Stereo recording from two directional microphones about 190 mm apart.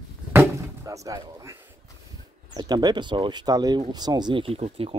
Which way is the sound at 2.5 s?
20° right (ahead or behind).